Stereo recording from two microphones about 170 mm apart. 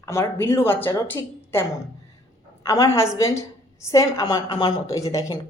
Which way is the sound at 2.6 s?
20° left (ahead or behind).